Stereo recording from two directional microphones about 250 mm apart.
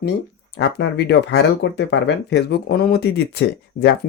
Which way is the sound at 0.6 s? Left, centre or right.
Left.